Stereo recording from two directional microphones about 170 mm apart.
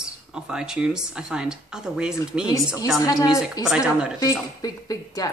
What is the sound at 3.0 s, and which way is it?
Speech, 20° left (ahead or behind).